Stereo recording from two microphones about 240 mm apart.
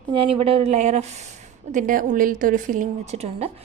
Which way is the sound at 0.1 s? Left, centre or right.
Right.